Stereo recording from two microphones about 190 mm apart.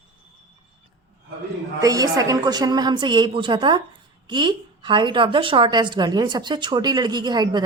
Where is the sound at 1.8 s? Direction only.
20° right (ahead or behind).